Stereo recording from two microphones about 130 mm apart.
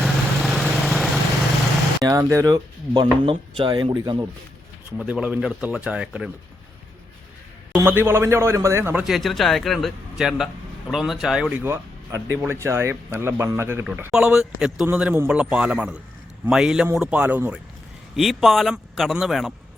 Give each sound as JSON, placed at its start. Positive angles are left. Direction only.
{"t": 0.0, "sound": "vehicle", "side_deg": 0}
{"t": 2.0, "sound": "speech", "side_deg": -25}
{"t": 4.9, "sound": "speech", "side_deg": -10}
{"t": 7.9, "sound": "a man's voice", "side_deg": -15}
{"t": 9.0, "sound": "a man's voice", "side_deg": 0}
{"t": 11.6, "sound": "a man's voice", "side_deg": -20}
{"t": 14.1, "sound": "a man's voice", "side_deg": -5}
{"t": 18.2, "sound": "a man's voice", "side_deg": 0}